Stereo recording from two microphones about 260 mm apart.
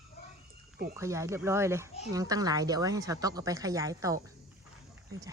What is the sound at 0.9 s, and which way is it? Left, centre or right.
Speech, centre.